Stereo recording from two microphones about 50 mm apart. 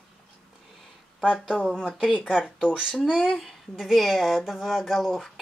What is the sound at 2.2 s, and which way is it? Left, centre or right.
Speech, centre.